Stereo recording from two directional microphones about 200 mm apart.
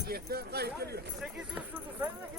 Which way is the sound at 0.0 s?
50° right (ahead or behind).